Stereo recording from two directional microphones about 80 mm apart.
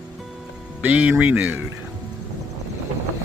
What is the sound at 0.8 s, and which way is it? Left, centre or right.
Speech, centre.